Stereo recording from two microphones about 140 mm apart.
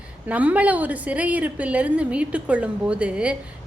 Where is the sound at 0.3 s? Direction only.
10° right (ahead or behind).